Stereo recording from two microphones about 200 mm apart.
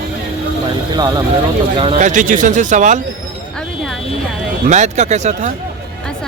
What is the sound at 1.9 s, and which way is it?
Speech, 40° right (ahead or behind).